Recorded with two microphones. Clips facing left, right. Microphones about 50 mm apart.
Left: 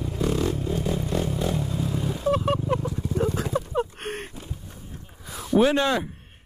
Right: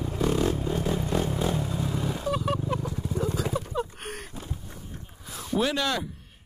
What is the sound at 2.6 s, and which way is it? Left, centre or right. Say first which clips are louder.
Horse: left 4 dB; left.